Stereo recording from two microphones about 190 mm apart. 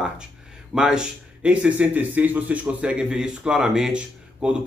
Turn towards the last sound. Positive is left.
turn(degrees=-5)  # may be behind; listen again after turning